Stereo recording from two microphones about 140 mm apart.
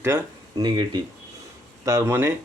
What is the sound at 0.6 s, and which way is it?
Speech, 30° right (ahead or behind).